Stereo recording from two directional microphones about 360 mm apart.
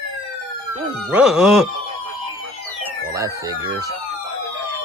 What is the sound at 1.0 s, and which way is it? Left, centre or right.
Music, centre.